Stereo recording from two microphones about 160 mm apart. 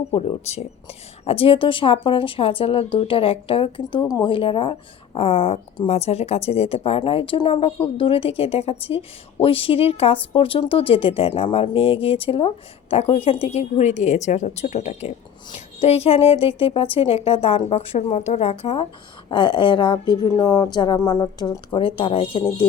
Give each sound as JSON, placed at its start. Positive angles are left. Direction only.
{"t": 0.1, "sound": "a woman's voice", "side_deg": 40}